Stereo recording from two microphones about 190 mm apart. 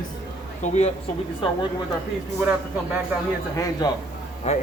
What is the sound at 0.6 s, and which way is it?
Speech, 35° left (ahead or behind).